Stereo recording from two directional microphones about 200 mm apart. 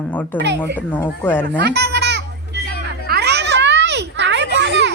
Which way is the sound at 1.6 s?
55° right (ahead or behind).